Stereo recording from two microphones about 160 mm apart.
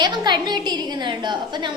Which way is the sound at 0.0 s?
25° right (ahead or behind).